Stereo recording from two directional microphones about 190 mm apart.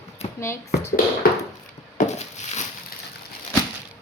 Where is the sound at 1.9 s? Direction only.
40° left (ahead or behind).